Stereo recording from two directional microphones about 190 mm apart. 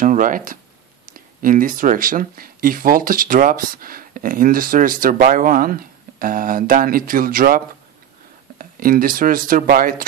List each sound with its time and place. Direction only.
0.0 s speech: 45° right (ahead or behind)